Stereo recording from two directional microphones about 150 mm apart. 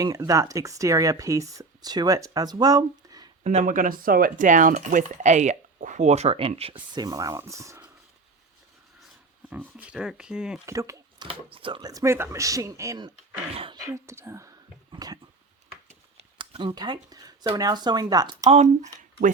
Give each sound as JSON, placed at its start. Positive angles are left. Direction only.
{"t": 0.0, "sound": "speech", "side_deg": -25}
{"t": 3.4, "sound": "speech", "side_deg": -55}
{"t": 9.5, "sound": "speech", "side_deg": -10}
{"t": 10.7, "sound": "speech", "side_deg": -20}
{"t": 11.3, "sound": "speech", "side_deg": -35}
{"t": 13.5, "sound": "speech", "side_deg": -40}
{"t": 13.8, "sound": "speech", "side_deg": -20}
{"t": 16.4, "sound": "speech", "side_deg": -35}
{"t": 18.4, "sound": "speech", "side_deg": -50}